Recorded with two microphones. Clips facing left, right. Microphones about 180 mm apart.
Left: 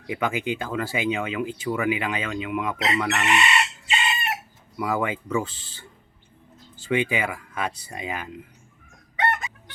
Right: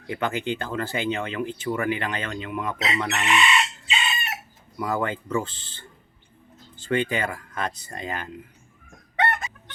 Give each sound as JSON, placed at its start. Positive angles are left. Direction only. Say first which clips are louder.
{"t": 0.1, "sound": "speech", "louder": "left 1 dB", "side_deg": 10}
{"t": 3.3, "sound": "chicken", "louder": "right 1 dB", "side_deg": 60}
{"t": 4.8, "sound": "speech", "louder": "left 1 dB", "side_deg": 10}